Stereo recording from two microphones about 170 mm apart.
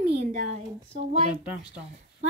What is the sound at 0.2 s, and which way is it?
Speech, 50° right (ahead or behind).